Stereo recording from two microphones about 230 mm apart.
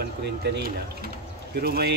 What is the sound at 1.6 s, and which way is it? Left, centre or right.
Speech, right.